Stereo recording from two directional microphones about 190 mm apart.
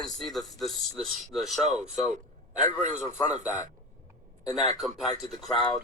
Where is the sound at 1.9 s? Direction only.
40° right (ahead or behind).